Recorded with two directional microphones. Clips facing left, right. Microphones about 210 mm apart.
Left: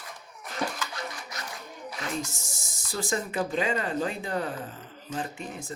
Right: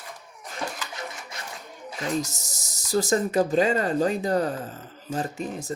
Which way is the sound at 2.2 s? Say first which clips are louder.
Right 1 dB; 40° right (ahead or behind).